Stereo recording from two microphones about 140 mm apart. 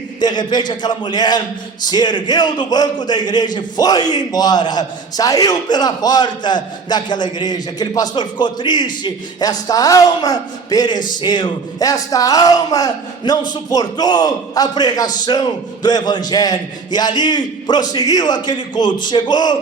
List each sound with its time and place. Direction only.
0.2 s a man's voice: 30° left (ahead or behind)